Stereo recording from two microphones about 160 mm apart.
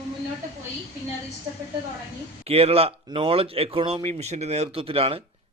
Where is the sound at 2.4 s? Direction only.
40° right (ahead or behind).